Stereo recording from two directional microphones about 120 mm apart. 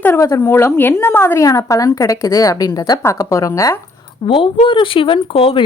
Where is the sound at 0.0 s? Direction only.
20° left (ahead or behind).